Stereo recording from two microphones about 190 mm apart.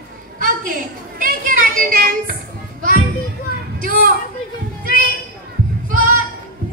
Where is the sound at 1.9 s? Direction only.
50° right (ahead or behind).